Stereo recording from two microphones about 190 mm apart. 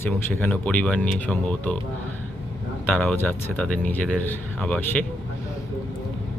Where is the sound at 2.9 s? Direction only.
5° left (ahead or behind).